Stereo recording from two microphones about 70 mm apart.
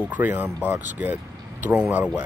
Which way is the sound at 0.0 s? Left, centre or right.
Right.